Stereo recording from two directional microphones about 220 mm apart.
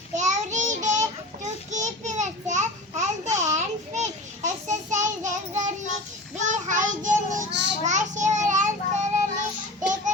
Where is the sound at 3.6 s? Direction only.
30° right (ahead or behind).